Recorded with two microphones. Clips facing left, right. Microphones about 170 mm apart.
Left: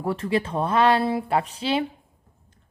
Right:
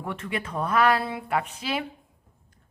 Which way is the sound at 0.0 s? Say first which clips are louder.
Left 8 dB; 35° left (ahead or behind).